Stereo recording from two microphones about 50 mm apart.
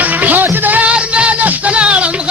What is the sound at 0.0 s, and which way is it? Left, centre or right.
Music, right.